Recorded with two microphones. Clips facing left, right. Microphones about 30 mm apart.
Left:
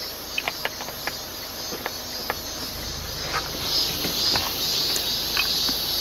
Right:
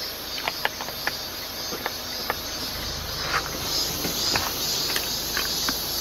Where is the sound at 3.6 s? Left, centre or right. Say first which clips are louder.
Left 2 dB; left.